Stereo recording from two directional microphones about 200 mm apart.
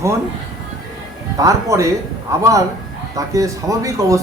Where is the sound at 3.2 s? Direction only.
15° right (ahead or behind).